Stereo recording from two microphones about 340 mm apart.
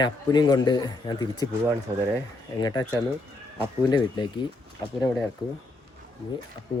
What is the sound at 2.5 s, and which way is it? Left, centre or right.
Speech, centre.